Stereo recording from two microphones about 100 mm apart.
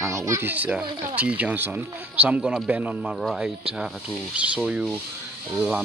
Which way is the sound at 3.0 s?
Centre (ahead or behind).